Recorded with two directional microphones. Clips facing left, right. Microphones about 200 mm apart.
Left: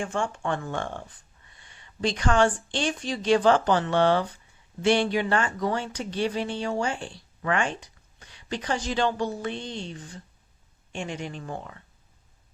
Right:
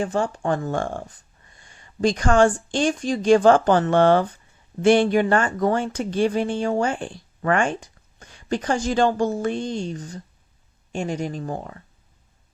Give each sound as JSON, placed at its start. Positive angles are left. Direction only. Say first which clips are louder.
{"t": 0.0, "sound": "speech", "louder": "right 5 dB", "side_deg": -35}